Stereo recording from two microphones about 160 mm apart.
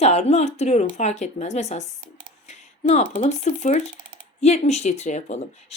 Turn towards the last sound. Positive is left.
turn(degrees=45)  # may be behind; listen again after turning